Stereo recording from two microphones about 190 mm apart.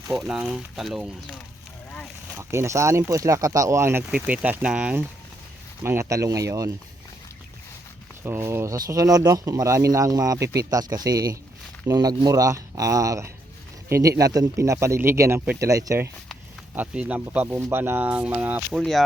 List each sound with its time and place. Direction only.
0.2 s speech: 5° right (ahead or behind)
2.4 s speech: 15° right (ahead or behind)
8.2 s speech: 15° right (ahead or behind)
18.8 s speech: centre (ahead or behind)